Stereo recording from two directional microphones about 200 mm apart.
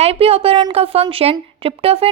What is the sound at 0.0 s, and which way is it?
A woman's voice, 30° right (ahead or behind).